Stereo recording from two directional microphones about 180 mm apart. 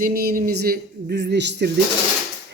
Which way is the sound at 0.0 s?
55° right (ahead or behind).